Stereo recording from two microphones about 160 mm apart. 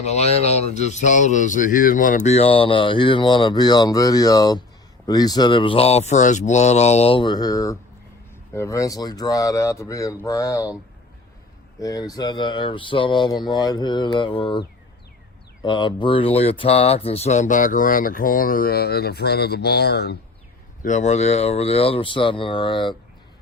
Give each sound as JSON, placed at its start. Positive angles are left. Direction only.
{"t": 0.0, "sound": "speech", "side_deg": 45}
{"t": 11.8, "sound": "speech", "side_deg": 20}
{"t": 20.8, "sound": "speech", "side_deg": 50}